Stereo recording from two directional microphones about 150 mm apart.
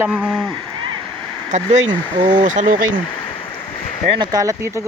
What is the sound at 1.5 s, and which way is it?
Speech, 55° right (ahead or behind).